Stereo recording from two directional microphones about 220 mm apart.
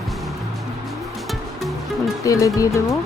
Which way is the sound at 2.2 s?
15° left (ahead or behind).